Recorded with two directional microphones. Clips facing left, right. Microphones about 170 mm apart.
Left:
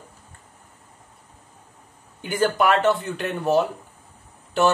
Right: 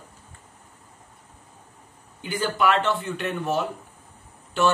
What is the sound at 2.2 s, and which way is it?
Speech, 45° left (ahead or behind).